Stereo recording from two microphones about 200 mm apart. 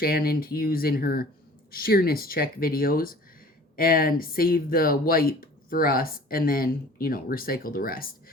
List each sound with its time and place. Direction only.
0.0 s speech: 50° left (ahead or behind)